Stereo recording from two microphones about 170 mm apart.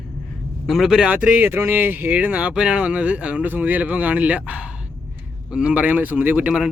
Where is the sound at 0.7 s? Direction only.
Centre (ahead or behind).